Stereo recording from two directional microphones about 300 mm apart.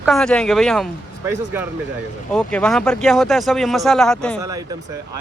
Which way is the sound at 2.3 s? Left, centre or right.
Centre.